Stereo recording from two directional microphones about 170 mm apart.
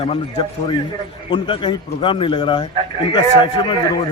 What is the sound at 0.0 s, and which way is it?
A man's voice, 35° left (ahead or behind).